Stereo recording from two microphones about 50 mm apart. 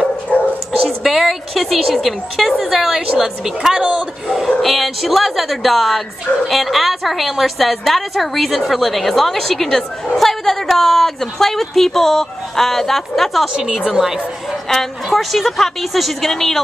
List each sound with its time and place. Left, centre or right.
0.3 s dog: left
1.0 s a woman's voice: centre
4.5 s a woman's voice: centre
13.5 s a woman's voice: centre
15.0 s a woman's voice: centre